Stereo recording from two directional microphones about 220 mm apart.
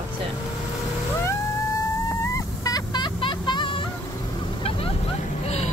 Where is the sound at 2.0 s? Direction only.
15° left (ahead or behind).